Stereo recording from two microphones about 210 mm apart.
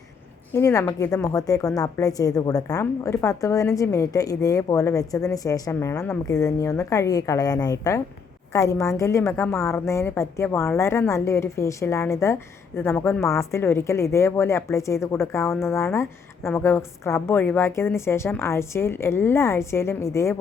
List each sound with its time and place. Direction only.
0.5 s a woman's voice: 15° left (ahead or behind)